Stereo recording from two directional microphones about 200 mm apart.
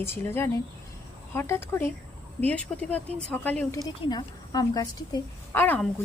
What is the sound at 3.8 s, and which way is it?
A woman's voice, 20° left (ahead or behind).